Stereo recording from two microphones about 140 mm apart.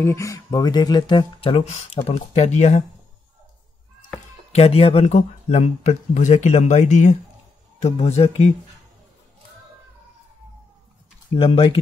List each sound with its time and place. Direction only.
0.0 s speech: 20° left (ahead or behind); by 2.8 s 50° left (ahead or behind)
4.5 s speech: 45° left (ahead or behind)
11.3 s speech: 45° left (ahead or behind)